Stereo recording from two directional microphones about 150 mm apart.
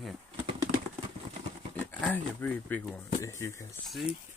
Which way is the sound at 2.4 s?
10° left (ahead or behind).